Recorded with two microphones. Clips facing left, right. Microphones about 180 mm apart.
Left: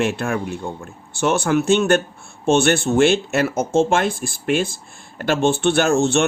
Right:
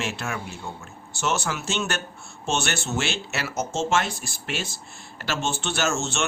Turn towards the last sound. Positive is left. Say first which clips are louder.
# left 10 dB
turn(degrees=55)  # may be behind; listen again after turning